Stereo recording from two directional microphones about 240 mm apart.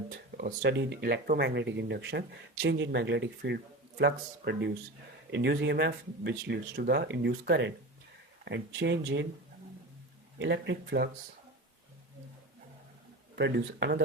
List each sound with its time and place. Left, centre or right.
0.1 s speech: right
10.3 s speech: right
13.3 s speech: right